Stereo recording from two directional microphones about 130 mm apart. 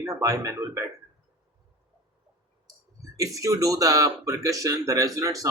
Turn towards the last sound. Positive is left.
turn(degrees=-25)  # may be behind; listen again after turning